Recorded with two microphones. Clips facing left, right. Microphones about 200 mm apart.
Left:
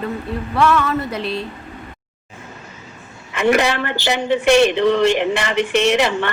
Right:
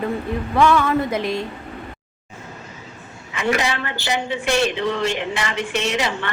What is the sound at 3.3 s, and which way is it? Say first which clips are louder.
A man's voice: left 5 dB; 60° left (ahead or behind).